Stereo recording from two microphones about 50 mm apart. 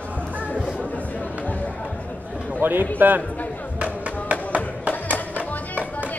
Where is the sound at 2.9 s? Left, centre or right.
Right.